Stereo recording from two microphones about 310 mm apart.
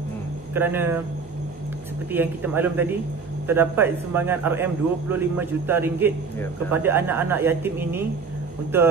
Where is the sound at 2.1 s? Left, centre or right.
Centre.